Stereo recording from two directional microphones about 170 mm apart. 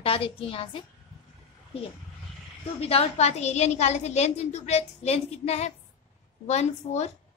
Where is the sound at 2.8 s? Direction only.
35° left (ahead or behind).